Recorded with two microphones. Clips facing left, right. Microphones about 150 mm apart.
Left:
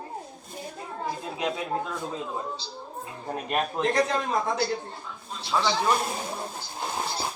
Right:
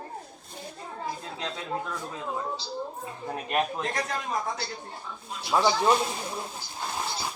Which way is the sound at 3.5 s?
25° left (ahead or behind).